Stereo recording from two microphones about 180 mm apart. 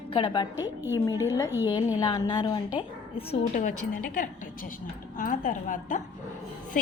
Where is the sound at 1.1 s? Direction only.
20° left (ahead or behind).